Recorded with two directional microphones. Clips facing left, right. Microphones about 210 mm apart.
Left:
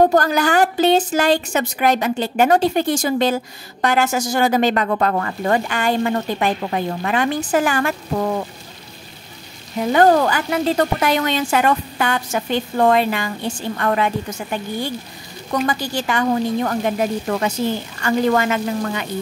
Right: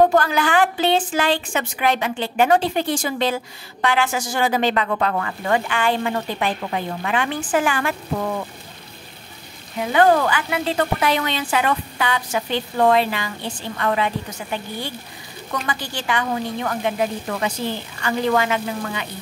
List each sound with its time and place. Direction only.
0.1 s a woman's voice: 40° left (ahead or behind)
9.9 s a woman's voice: 40° left (ahead or behind)